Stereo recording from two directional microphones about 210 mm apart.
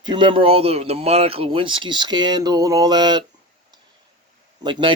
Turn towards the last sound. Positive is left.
turn(degrees=-25)  # may be behind; listen again after turning